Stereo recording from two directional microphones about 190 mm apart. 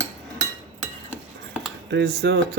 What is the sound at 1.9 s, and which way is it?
Speech, 65° right (ahead or behind).